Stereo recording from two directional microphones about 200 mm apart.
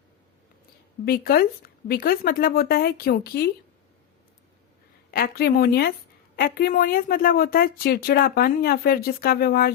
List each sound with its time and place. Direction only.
1.0 s a woman's voice: 50° left (ahead or behind)
5.1 s a woman's voice: 50° left (ahead or behind)